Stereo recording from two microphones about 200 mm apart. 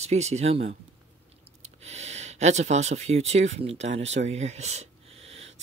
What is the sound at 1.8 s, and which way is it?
Speech, 35° right (ahead or behind).